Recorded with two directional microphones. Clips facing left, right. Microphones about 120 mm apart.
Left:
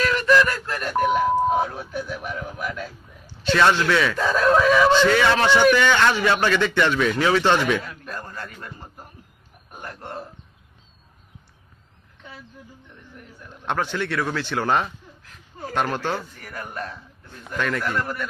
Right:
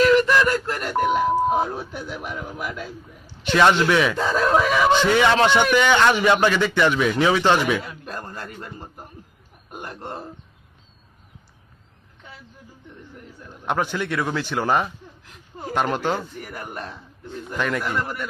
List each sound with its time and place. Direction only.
0.4 s a sound: 25° right (ahead or behind)
1.4 s beep: 20° right (ahead or behind)
2.2 s a man's voice: 20° right (ahead or behind)
8.0 s a man's voice: 30° right (ahead or behind)
13.7 s speech: 10° right (ahead or behind)